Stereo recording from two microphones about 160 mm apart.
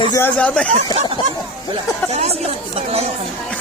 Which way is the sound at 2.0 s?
45° right (ahead or behind).